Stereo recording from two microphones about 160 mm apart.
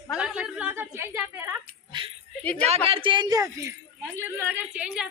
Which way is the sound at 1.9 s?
30° right (ahead or behind).